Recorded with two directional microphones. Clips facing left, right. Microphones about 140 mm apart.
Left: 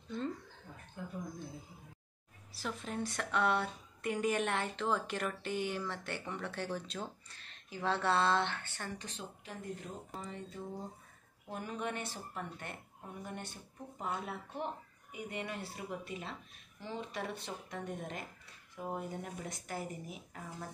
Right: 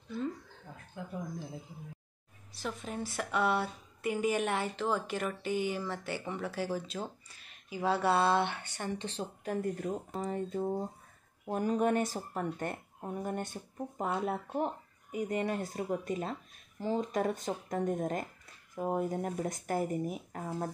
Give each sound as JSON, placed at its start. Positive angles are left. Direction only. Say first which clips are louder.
{"t": 2.5, "sound": "speech", "louder": "right 2 dB", "side_deg": 0}
{"t": 9.4, "sound": "speech", "louder": "right 12 dB", "side_deg": -50}